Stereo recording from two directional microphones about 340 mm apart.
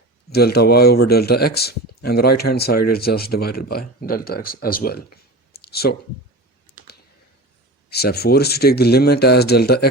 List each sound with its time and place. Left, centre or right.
0.3 s speech: left
7.9 s speech: left